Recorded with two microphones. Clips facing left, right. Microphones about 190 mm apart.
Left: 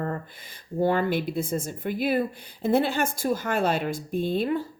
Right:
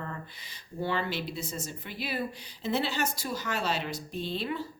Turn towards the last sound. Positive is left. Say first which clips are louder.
# left 8 dB
turn(degrees=50)  # may be behind; listen again after turning